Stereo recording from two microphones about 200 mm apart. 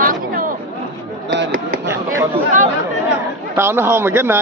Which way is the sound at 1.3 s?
55° right (ahead or behind).